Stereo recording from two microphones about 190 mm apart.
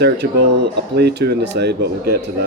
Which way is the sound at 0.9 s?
60° right (ahead or behind).